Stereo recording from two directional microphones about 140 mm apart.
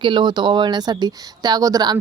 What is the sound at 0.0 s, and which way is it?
Speech, 35° right (ahead or behind).